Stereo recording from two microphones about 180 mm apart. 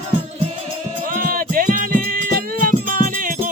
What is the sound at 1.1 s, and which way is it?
Music, 50° right (ahead or behind).